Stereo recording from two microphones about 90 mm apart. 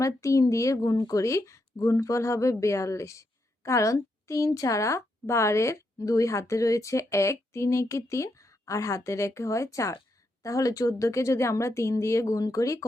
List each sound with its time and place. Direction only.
0.0 s speech: 35° left (ahead or behind)